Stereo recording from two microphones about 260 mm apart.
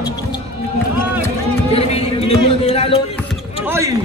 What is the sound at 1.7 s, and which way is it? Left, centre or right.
A man's voice, left.